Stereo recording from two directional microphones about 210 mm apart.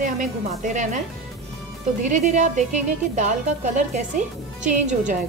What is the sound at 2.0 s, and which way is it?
A woman's voice, 35° right (ahead or behind).